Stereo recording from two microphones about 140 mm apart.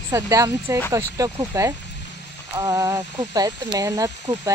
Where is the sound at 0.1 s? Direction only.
20° right (ahead or behind).